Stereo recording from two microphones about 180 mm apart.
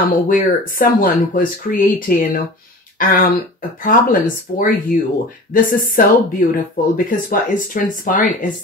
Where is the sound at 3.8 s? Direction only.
50° left (ahead or behind).